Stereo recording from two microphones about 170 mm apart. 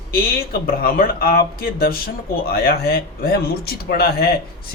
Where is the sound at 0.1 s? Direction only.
60° left (ahead or behind).